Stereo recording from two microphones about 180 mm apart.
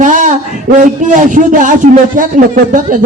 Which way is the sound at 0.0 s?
45° right (ahead or behind).